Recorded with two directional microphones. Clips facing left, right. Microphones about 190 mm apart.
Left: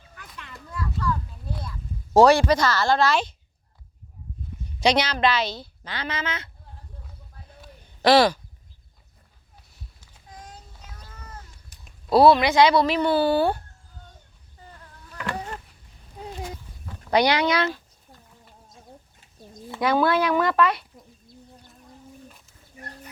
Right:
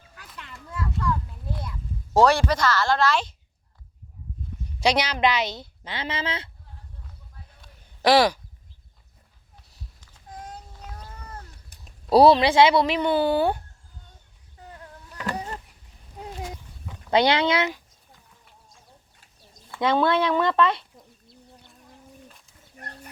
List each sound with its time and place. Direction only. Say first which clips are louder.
2.1 s speech: left 3 dB; 10° left (ahead or behind)
4.8 s a woman's voice: left 1 dB; 10° right (ahead or behind); by 6.5 s 30° right (ahead or behind)
8.0 s speech: left 1 dB; 15° right (ahead or behind)
12.1 s a woman's voice: right 1 dB; 35° right (ahead or behind); by 13.6 s 15° right (ahead or behind)
16.9 s speech: even; 25° right (ahead or behind)
19.8 s a woman's voice: even; 25° right (ahead or behind)